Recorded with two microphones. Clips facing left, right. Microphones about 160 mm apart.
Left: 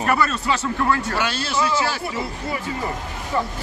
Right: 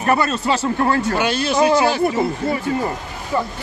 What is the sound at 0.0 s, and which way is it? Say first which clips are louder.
Speech: right 3 dB; 30° right (ahead or behind).